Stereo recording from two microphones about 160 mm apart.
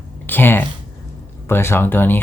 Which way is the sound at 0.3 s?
15° left (ahead or behind).